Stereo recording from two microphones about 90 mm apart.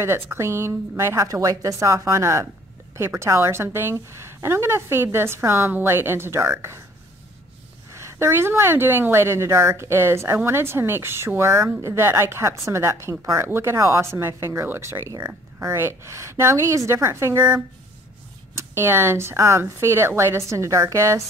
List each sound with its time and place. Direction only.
0.0 s a woman's voice: 30° right (ahead or behind)
7.9 s a woman's voice: 30° right (ahead or behind)
18.6 s a woman's voice: 25° right (ahead or behind)